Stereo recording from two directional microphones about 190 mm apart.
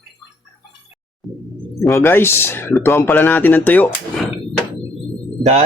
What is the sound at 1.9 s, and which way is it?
Speech, 15° left (ahead or behind).